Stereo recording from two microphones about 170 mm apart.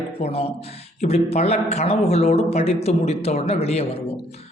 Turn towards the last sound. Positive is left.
turn(degrees=35)  # may be behind; listen again after turning